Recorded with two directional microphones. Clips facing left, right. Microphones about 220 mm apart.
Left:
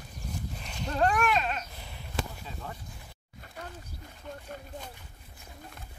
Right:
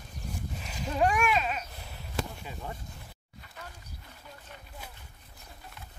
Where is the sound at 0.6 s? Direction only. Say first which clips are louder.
Even; 5° right (ahead or behind).